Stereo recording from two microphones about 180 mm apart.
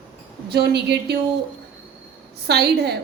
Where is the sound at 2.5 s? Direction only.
65° right (ahead or behind).